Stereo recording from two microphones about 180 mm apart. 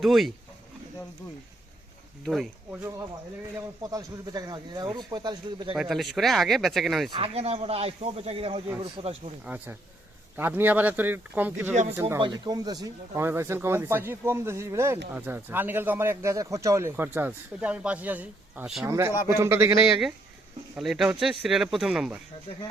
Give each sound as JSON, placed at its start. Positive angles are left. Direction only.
{"t": 0.0, "sound": "speech", "side_deg": 0}
{"t": 2.2, "sound": "speech", "side_deg": 0}
{"t": 3.8, "sound": "speech", "side_deg": -20}
{"t": 5.7, "sound": "speech", "side_deg": 0}
{"t": 7.1, "sound": "speech", "side_deg": -35}
{"t": 10.3, "sound": "speech", "side_deg": -10}
{"t": 11.7, "sound": "speech", "side_deg": -40}
{"t": 11.9, "sound": "speech", "side_deg": -15}
{"t": 18.9, "sound": "speech", "side_deg": -15}
{"t": 19.9, "sound": "speech", "side_deg": 0}